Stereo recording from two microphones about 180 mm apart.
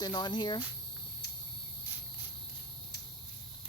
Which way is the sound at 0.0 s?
25° left (ahead or behind).